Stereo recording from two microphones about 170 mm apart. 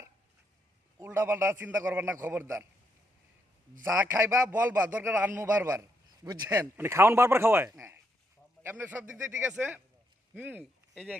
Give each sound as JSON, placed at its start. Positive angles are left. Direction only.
{"t": 0.9, "sound": "a man's voice", "side_deg": -15}
{"t": 3.8, "sound": "a man's voice", "side_deg": -15}